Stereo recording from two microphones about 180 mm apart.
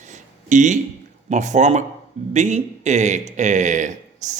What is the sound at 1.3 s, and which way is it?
A man's voice, 40° right (ahead or behind).